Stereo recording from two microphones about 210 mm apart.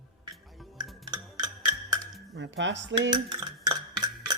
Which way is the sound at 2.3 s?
60° right (ahead or behind).